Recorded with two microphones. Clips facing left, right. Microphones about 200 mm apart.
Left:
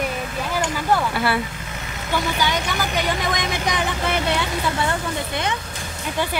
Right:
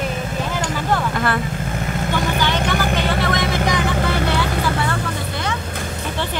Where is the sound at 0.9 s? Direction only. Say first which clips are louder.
Even; 10° left (ahead or behind).